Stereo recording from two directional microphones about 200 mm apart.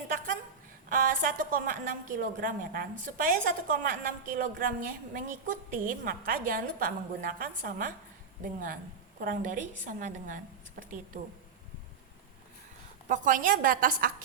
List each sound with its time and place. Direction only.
0.9 s a woman's voice: 40° right (ahead or behind)
9.2 s a woman's voice: 45° right (ahead or behind)
13.1 s a woman's voice: 40° right (ahead or behind)